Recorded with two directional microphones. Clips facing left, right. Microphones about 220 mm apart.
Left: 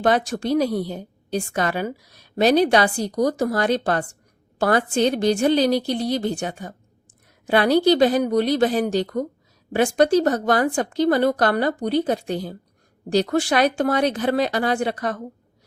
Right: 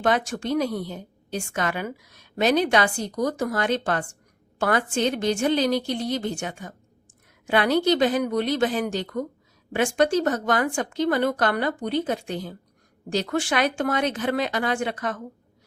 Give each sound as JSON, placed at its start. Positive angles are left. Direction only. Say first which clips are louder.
{"t": 0.0, "sound": "a woman's voice", "louder": "left 3 dB", "side_deg": 35}